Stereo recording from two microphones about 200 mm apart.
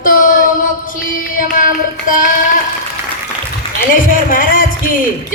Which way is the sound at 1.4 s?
45° left (ahead or behind).